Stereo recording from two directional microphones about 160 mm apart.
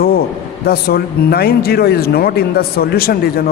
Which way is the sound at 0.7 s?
75° left (ahead or behind).